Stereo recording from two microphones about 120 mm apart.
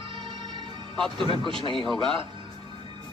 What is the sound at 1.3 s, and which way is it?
Speech, 45° right (ahead or behind).